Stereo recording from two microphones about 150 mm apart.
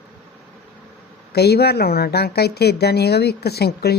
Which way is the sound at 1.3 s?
90° left.